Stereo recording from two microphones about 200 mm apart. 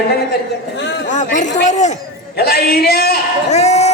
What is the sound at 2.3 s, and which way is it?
Speech, 50° left (ahead or behind).